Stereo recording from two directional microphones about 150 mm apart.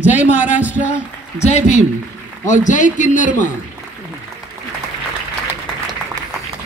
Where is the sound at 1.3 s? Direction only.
50° left (ahead or behind).